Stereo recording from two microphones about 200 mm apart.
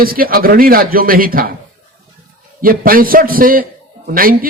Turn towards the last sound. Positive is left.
turn(degrees=-45)  # may be behind; listen again after turning